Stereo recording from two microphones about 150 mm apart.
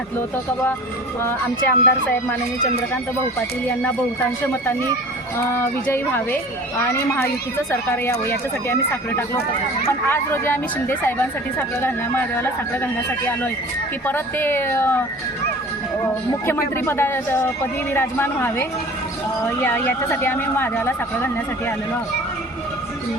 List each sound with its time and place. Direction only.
1.2 s speech: 10° left (ahead or behind)
5.4 s speech: 15° left (ahead or behind)
16.3 s speech: 15° left (ahead or behind)